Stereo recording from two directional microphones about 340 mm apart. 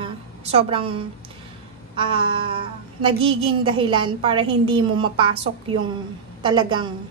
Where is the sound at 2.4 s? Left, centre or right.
Centre.